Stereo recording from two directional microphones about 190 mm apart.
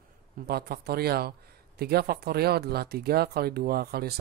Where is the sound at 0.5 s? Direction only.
55° right (ahead or behind).